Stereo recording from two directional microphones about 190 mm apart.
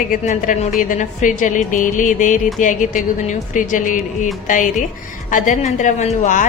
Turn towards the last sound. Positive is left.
turn(degrees=40)  # may be behind; listen again after turning